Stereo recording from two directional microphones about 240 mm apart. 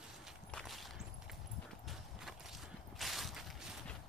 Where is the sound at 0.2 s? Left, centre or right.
Centre.